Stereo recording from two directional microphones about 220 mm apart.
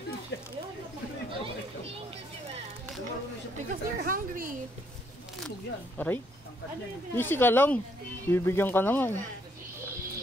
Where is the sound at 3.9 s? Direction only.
40° right (ahead or behind).